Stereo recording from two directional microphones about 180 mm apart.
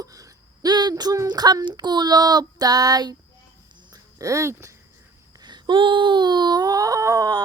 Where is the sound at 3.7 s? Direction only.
25° right (ahead or behind).